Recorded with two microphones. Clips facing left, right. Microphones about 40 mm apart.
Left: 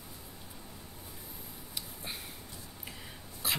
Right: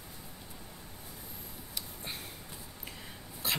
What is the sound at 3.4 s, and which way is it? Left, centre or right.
Dog, centre.